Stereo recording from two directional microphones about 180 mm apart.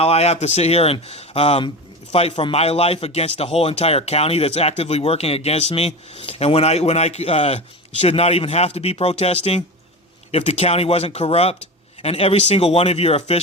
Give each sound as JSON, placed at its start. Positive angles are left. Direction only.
{"t": 0.0, "sound": "a man's voice", "side_deg": 35}